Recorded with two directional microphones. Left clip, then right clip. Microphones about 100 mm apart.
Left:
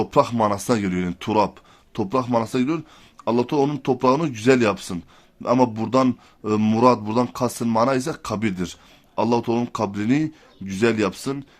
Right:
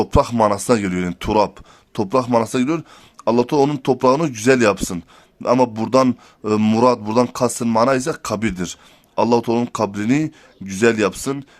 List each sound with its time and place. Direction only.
0.0 s speech: 35° right (ahead or behind)